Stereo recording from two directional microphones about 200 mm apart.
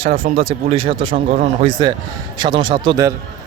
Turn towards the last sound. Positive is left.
turn(degrees=-25)  # may be behind; listen again after turning